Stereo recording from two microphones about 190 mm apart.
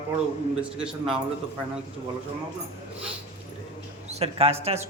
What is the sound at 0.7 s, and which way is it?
Speech, 5° right (ahead or behind).